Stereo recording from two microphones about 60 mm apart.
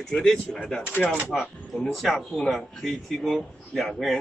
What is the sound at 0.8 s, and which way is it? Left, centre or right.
Speech, left.